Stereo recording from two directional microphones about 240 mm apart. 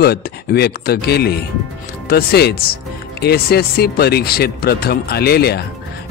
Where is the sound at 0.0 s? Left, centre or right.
Left.